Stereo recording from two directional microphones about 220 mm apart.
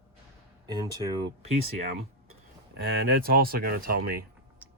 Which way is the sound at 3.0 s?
45° right (ahead or behind).